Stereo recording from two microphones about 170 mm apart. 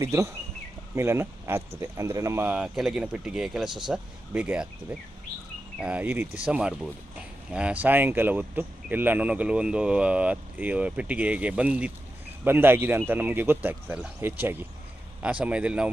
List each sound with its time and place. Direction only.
0.0 s speech: 15° right (ahead or behind)